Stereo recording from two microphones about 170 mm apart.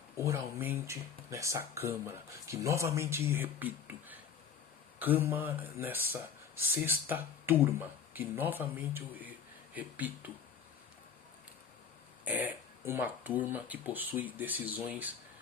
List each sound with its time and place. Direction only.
0.2 s speech: 15° right (ahead or behind)
12.2 s speech: 10° right (ahead or behind)